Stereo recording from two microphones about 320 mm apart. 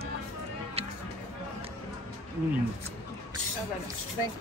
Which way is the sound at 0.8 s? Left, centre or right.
Centre.